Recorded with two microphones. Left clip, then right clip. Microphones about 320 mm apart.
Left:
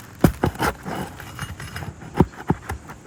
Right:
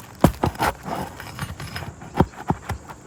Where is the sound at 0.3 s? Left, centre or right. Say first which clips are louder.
Right 1 dB; right.